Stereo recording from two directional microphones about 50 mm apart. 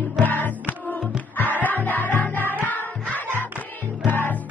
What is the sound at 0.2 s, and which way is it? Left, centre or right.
Music, left.